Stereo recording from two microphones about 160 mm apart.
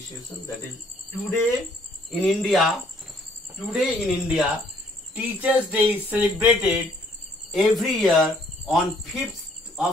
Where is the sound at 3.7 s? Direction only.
Centre (ahead or behind).